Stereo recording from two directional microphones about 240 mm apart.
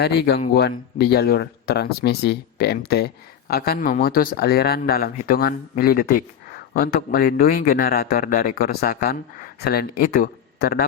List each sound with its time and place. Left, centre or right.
0.0 s speech: left